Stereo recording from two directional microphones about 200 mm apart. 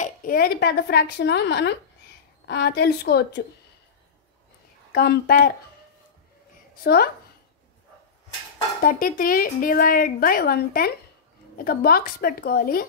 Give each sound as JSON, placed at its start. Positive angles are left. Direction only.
{"t": 0.0, "sound": "speech", "side_deg": 45}
{"t": 4.9, "sound": "speech", "side_deg": 55}
{"t": 6.7, "sound": "a woman's voice", "side_deg": 50}
{"t": 8.8, "sound": "speech", "side_deg": 45}